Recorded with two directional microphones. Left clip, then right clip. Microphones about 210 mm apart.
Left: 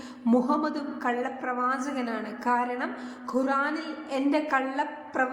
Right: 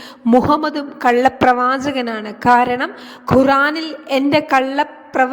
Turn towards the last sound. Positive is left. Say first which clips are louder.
# right 11 dB
turn(degrees=-35)  # may be behind; listen again after turning